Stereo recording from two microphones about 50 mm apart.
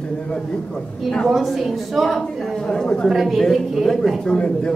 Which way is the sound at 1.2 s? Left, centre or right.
Centre.